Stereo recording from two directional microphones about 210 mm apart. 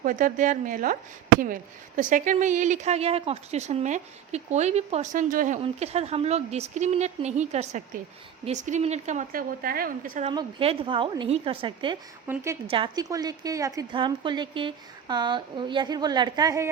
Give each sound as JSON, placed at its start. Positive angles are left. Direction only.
{"t": 0.0, "sound": "speech", "side_deg": -40}
{"t": 10.2, "sound": "a woman's voice", "side_deg": -30}
{"t": 12.3, "sound": "a woman's voice", "side_deg": -15}